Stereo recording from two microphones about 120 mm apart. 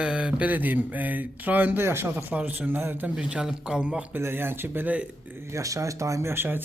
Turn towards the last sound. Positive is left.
turn(degrees=-20)  # may be behind; listen again after turning